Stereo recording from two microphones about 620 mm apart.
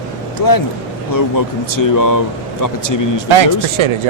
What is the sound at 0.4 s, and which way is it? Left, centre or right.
Speech, left.